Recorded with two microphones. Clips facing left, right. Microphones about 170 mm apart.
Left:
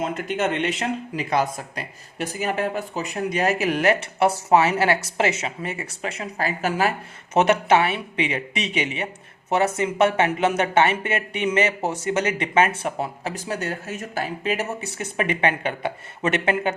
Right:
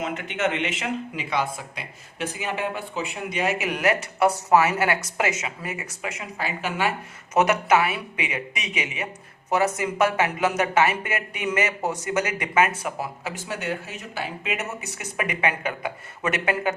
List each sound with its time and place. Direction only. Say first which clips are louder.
0.0 s speech: left 2 dB; 40° left (ahead or behind)
7.3 s speech: left 2 dB; 30° left (ahead or behind)